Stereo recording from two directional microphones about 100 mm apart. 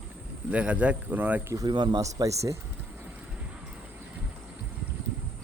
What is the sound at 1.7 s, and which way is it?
Speech, 50° right (ahead or behind).